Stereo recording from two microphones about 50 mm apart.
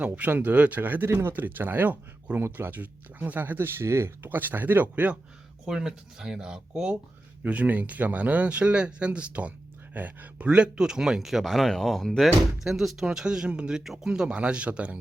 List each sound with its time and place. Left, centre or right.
0.3 s speech: right
1.0 s speech: right
1.3 s speech: right
2.4 s speech: right
4.3 s speech: right
5.6 s speech: centre
7.4 s speech: right
9.9 s speech: right
10.3 s speech: right; by 12.3 s centre
12.6 s speech: centre
13.8 s speech: centre
14.1 s speech: centre